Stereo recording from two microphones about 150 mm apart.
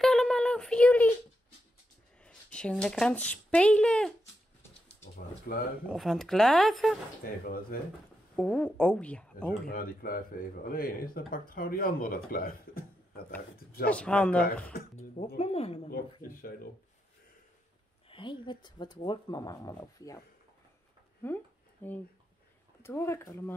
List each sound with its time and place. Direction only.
0.0 s a sound: 5° left (ahead or behind)
2.2 s speech: 5° left (ahead or behind)
5.5 s speech: 75° left (ahead or behind)
5.9 s speech: centre (ahead or behind)
7.2 s speech: 90° left
8.4 s a woman's voice: 10° left (ahead or behind)
9.7 s speech: 70° left (ahead or behind)
13.8 s a woman's voice: 10° left (ahead or behind)
15.0 s speech: 45° left (ahead or behind)
15.9 s speech: 70° left (ahead or behind)
18.0 s speech: 35° left (ahead or behind)
21.8 s a woman's voice: 10° left (ahead or behind)